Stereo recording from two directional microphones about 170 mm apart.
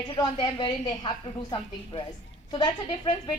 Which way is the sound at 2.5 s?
25° left (ahead or behind).